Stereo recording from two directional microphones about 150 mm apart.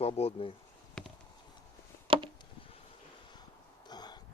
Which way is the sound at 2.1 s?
35° right (ahead or behind).